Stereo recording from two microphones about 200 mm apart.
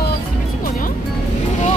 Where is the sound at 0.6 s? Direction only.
40° left (ahead or behind).